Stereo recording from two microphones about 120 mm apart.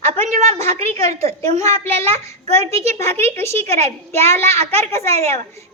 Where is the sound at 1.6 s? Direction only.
20° left (ahead or behind).